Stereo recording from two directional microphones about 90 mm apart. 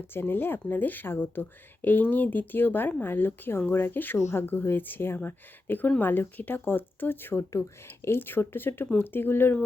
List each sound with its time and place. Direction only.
0.1 s speech: 25° left (ahead or behind)